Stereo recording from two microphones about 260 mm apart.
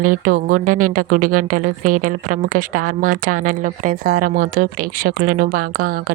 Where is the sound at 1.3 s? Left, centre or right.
Right.